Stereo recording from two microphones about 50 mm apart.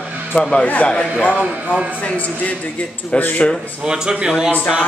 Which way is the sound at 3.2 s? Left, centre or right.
Left.